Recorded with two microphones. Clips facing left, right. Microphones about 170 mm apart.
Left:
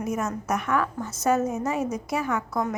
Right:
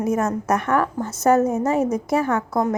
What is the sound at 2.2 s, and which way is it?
Speech, 50° right (ahead or behind).